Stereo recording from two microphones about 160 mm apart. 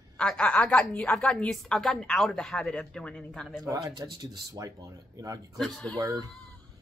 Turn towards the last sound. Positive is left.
turn(degrees=-25)  # may be behind; listen again after turning